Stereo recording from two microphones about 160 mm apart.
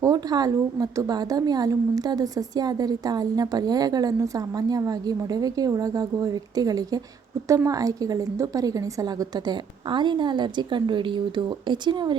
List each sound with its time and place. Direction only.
0.0 s a woman's voice: 25° right (ahead or behind)